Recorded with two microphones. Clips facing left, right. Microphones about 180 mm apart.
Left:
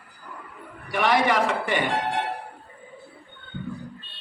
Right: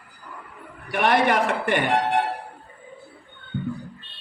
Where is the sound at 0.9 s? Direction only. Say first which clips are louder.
Right 1 dB; 55° right (ahead or behind).